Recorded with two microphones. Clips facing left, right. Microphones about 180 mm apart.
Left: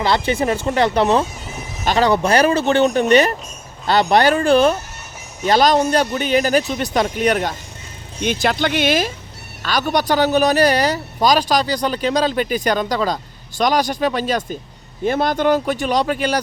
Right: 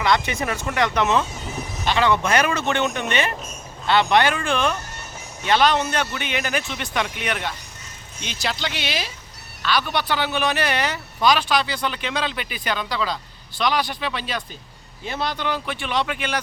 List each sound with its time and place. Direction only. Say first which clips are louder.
0.0 s speech: left 4 dB; 30° left (ahead or behind)
8.2 s speech: left 10 dB; 55° left (ahead or behind)